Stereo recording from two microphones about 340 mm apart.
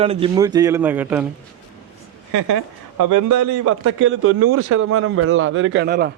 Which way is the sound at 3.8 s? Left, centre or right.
Right.